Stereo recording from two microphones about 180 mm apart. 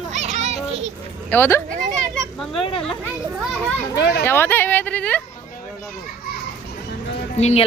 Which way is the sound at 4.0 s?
65° left (ahead or behind).